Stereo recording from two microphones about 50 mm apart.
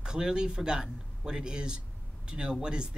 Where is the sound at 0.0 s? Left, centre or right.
Centre.